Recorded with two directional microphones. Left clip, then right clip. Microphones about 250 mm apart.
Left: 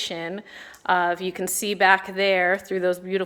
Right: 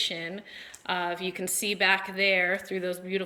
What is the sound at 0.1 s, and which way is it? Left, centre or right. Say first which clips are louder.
A woman's voice: left 4 dB; centre.